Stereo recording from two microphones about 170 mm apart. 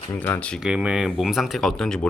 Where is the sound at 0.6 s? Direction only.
5° right (ahead or behind).